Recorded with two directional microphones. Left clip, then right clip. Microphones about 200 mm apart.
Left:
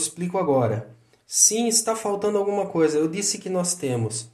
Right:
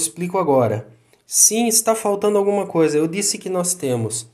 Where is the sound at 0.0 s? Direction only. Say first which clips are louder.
Right 4 dB; 40° right (ahead or behind).